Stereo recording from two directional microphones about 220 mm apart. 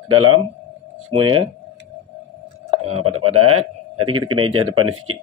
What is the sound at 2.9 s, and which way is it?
A man's voice, 80° right.